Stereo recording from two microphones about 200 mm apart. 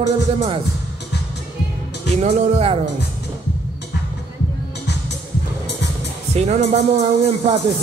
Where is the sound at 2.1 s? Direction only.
35° right (ahead or behind).